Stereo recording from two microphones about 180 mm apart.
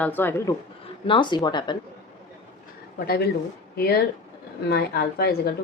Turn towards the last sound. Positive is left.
turn(degrees=60)  # may be behind; listen again after turning